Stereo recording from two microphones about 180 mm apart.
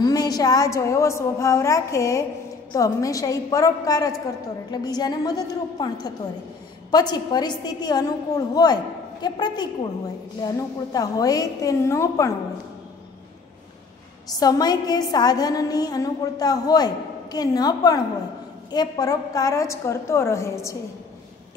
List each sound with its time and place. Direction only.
0.0 s a woman's voice: 20° left (ahead or behind)
14.4 s a woman's voice: 20° left (ahead or behind)